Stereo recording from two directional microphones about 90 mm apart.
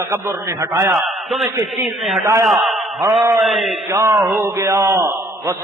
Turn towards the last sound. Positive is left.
turn(degrees=-30)  # may be behind; listen again after turning